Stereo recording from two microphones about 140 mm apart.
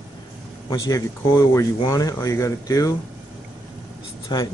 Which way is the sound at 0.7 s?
25° left (ahead or behind).